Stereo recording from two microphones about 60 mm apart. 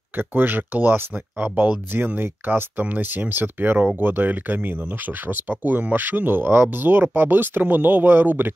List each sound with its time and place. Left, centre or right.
0.2 s speech: right